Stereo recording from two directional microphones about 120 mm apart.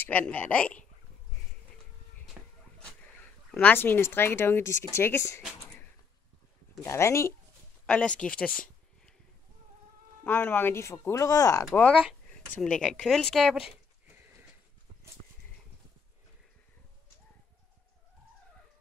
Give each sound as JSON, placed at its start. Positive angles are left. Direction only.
{"t": 0.0, "sound": "speech", "side_deg": 15}
{"t": 2.4, "sound": "a sound", "side_deg": -10}
{"t": 3.5, "sound": "speech", "side_deg": 20}
{"t": 6.8, "sound": "speech", "side_deg": 25}
{"t": 7.8, "sound": "a sound", "side_deg": 10}
{"t": 10.2, "sound": "speech", "side_deg": 15}
{"t": 12.5, "sound": "speech", "side_deg": 10}